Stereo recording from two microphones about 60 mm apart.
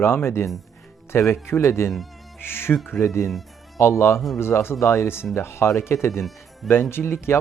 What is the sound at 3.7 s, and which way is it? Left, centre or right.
Speech, left.